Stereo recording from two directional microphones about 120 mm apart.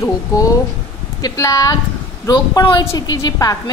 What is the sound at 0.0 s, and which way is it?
A woman's voice, 30° left (ahead or behind).